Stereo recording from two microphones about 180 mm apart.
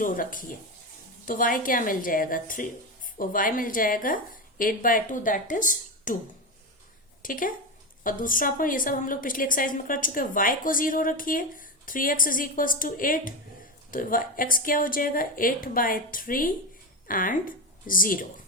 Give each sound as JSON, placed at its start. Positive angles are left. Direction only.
{"t": 0.0, "sound": "a woman's voice", "side_deg": 50}
{"t": 7.2, "sound": "a woman's voice", "side_deg": 50}